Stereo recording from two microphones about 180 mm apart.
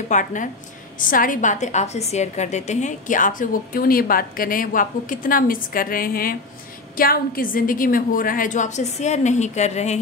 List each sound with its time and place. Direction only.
0.1 s a woman's voice: 45° left (ahead or behind)